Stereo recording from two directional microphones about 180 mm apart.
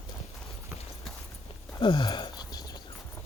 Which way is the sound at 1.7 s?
25° left (ahead or behind).